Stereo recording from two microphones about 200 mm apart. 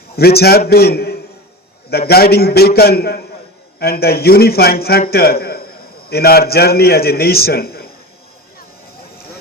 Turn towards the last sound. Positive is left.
turn(degrees=50)  # may be behind; listen again after turning